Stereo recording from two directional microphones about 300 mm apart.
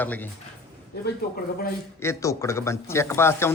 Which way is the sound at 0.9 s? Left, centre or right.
Left.